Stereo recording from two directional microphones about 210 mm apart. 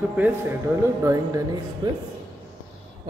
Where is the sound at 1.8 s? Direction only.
20° right (ahead or behind).